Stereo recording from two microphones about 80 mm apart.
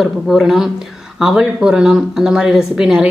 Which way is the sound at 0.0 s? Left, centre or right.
Centre.